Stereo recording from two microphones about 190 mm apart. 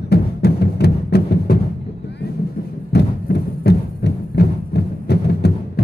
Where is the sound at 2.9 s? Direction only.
60° left (ahead or behind).